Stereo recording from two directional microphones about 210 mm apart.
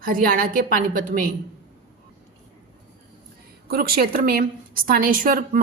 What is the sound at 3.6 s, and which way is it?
A woman's voice, 45° right (ahead or behind).